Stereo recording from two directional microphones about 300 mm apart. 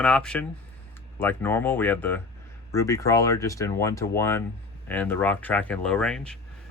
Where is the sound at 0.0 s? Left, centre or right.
Centre.